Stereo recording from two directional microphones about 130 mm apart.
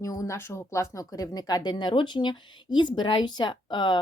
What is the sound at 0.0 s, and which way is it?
Speech, 25° left (ahead or behind).